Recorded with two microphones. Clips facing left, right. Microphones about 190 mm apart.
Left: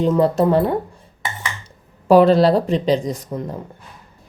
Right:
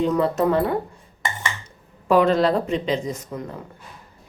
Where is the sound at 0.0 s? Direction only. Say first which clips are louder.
Left 4 dB; 35° left (ahead or behind).